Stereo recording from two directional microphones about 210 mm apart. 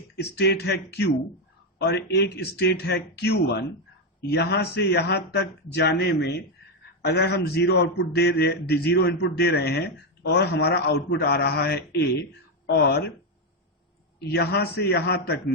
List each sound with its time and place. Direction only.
0.2 s a man's voice: 55° left (ahead or behind)
14.2 s a man's voice: 50° left (ahead or behind)